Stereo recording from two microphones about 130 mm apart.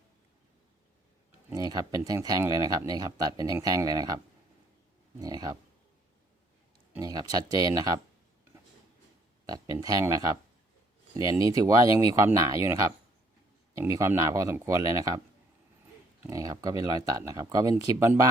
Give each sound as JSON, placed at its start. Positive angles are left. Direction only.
{"t": 1.5, "sound": "speech", "side_deg": -30}
{"t": 5.2, "sound": "speech", "side_deg": -30}
{"t": 7.0, "sound": "speech", "side_deg": -30}
{"t": 9.5, "sound": "speech", "side_deg": -30}
{"t": 16.3, "sound": "speech", "side_deg": -25}